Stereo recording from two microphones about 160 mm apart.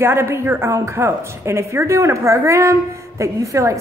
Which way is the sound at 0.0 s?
15° right (ahead or behind).